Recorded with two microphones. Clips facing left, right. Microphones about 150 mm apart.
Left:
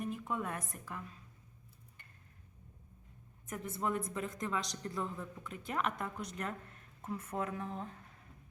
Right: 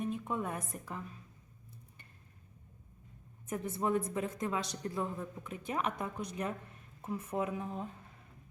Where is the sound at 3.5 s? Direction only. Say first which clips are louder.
Right 4 dB; 20° right (ahead or behind).